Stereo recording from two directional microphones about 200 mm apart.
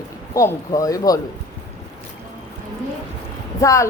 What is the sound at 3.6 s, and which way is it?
Speech, 15° left (ahead or behind).